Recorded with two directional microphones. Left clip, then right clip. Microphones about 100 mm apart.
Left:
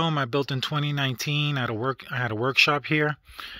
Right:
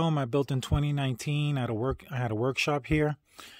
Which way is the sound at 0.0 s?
25° right (ahead or behind).